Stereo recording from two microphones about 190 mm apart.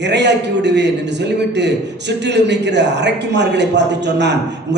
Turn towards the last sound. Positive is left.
turn(degrees=-65)  # may be behind; listen again after turning